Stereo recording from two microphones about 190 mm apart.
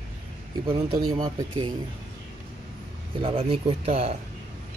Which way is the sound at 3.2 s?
30° right (ahead or behind).